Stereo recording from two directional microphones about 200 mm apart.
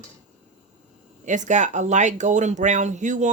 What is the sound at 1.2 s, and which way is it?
Speech, 35° right (ahead or behind).